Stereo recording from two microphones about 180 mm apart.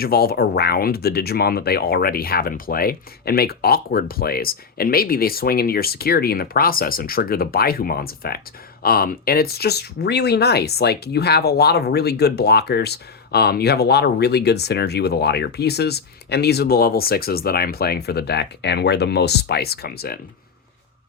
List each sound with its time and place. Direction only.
0.0 s speech: 60° left (ahead or behind)